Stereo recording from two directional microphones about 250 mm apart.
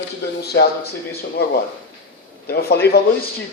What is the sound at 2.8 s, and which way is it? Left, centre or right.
Speech, left.